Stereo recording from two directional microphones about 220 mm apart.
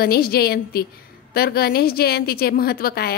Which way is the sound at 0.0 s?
45° left (ahead or behind).